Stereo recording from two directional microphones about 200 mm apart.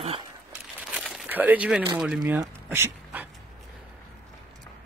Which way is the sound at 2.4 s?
10° right (ahead or behind).